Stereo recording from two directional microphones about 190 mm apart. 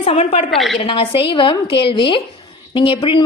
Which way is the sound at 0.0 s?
30° left (ahead or behind).